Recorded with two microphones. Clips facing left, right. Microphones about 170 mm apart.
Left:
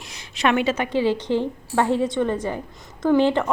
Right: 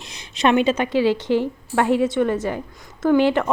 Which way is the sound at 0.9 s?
20° left (ahead or behind).